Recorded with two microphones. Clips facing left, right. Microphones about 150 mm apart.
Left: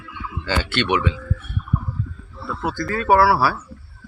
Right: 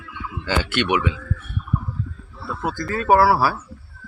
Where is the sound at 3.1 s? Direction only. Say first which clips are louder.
Even; 15° right (ahead or behind).